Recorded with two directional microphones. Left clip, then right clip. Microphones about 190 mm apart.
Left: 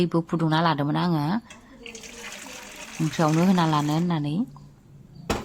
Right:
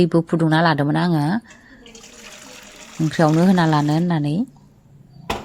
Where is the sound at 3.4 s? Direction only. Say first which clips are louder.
Right 5 dB; 20° right (ahead or behind).